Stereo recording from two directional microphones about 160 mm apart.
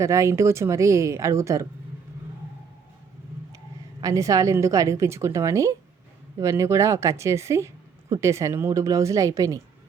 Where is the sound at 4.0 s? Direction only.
20° right (ahead or behind).